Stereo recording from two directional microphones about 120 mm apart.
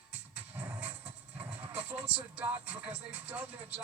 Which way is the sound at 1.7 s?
15° right (ahead or behind).